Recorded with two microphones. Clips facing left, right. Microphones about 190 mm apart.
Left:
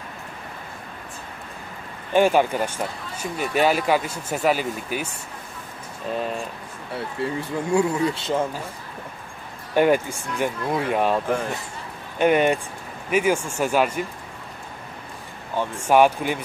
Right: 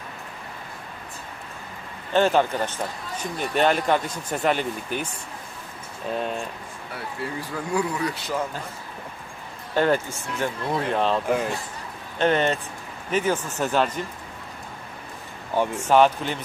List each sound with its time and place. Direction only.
2.1 s speech: 10° left (ahead or behind)
6.9 s speech: 25° left (ahead or behind)
9.8 s speech: 10° left (ahead or behind)
12.2 s speech: 10° left (ahead or behind)
15.7 s speech: 10° left (ahead or behind)